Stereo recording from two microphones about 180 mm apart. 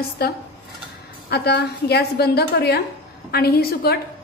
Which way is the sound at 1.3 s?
65° left (ahead or behind).